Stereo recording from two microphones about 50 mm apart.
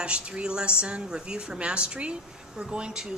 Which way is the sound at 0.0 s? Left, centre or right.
Right.